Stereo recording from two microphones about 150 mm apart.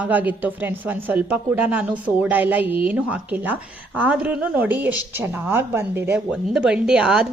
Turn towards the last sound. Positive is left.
turn(degrees=-5)  # may be behind; listen again after turning